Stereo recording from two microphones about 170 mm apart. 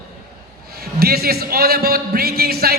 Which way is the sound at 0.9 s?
65° right (ahead or behind).